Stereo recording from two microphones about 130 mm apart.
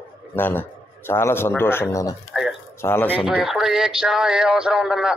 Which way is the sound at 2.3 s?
Centre (ahead or behind).